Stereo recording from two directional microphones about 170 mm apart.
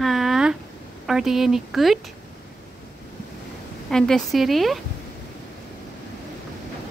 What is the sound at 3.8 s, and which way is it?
Speech, 5° left (ahead or behind).